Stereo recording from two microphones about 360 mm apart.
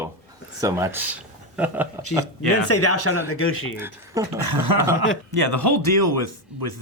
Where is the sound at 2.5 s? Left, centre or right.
Left.